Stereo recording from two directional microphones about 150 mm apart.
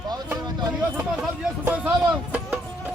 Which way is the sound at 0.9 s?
15° right (ahead or behind).